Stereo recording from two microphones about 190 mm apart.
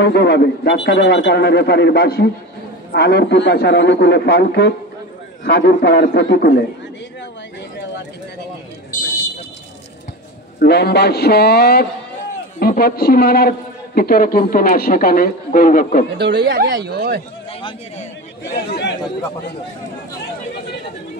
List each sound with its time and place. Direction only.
0.0 s speech: 60° left (ahead or behind)
10.6 s a woman's voice: 60° left (ahead or behind)
16.2 s speech: 65° right (ahead or behind)
17.5 s a man's voice: 30° left (ahead or behind)
18.5 s speech: 65° left (ahead or behind)